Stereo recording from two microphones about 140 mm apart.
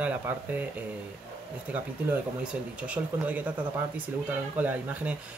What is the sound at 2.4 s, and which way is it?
Speech, 10° right (ahead or behind).